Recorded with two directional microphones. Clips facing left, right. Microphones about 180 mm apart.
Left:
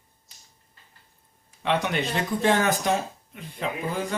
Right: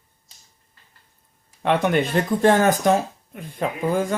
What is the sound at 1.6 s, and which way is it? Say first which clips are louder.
Speech: right 6 dB; 50° right (ahead or behind).